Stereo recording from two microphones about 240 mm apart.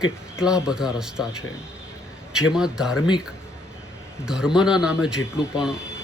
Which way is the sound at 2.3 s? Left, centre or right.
Centre.